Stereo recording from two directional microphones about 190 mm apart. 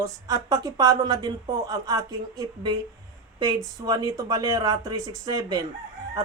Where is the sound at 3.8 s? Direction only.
20° right (ahead or behind).